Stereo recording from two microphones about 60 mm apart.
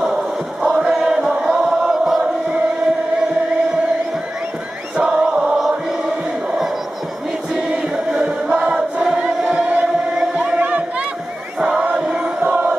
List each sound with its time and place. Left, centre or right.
0.0 s chant: centre
4.9 s music: centre
5.6 s choir: centre
11.8 s music: centre